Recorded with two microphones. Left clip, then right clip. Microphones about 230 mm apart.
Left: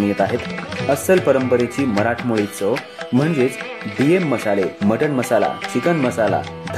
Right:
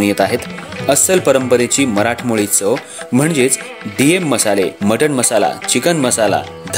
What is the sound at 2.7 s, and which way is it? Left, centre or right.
Speech, right.